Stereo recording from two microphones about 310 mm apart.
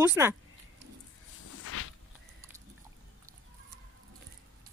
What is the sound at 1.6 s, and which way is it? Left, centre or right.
Walk, left.